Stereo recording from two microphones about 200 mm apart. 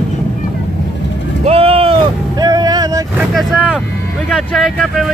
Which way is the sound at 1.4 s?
30° right (ahead or behind).